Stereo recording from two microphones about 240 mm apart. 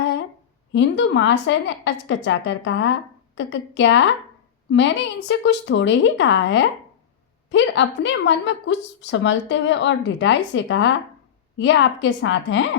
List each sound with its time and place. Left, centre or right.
0.7 s a woman's voice: left